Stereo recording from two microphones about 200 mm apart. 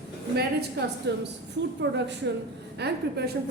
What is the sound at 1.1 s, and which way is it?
A woman's voice, 55° right (ahead or behind).